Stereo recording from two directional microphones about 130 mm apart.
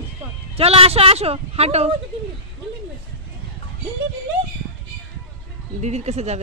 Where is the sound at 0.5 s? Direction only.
50° right (ahead or behind).